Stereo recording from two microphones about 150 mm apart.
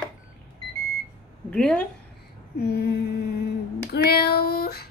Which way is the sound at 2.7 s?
90° left.